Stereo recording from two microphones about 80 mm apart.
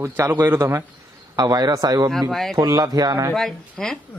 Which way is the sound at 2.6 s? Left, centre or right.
Right.